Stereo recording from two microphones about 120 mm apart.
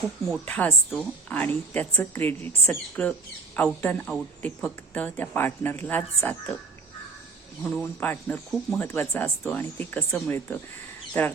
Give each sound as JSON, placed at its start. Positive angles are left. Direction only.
{"t": 0.3, "sound": "speech", "side_deg": 10}
{"t": 7.6, "sound": "speech", "side_deg": 15}
{"t": 8.4, "sound": "speech", "side_deg": 0}
{"t": 8.9, "sound": "speech", "side_deg": 15}